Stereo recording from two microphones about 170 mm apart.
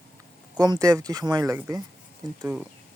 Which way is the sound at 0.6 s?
25° right (ahead or behind).